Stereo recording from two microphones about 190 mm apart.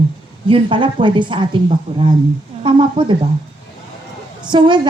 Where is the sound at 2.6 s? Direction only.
25° right (ahead or behind).